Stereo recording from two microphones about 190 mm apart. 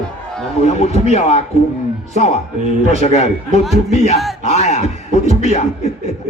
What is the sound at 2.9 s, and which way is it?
Speech, 35° left (ahead or behind).